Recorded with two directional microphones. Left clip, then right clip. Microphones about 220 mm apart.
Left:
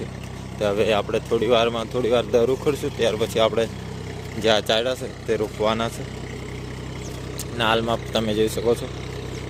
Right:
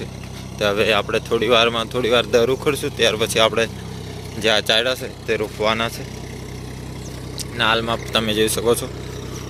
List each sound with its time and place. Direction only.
0.6 s speech: 5° left (ahead or behind)
7.6 s speech: 15° left (ahead or behind)